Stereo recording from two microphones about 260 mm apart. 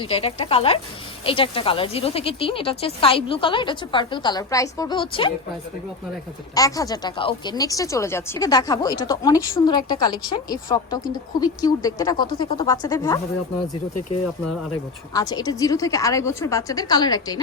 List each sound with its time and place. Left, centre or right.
0.0 s speech: left
6.5 s speech: centre
15.1 s speech: centre